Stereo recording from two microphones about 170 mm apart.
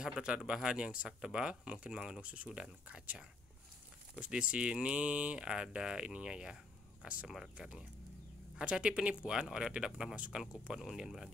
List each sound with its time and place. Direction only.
0.0 s speech: 5° right (ahead or behind)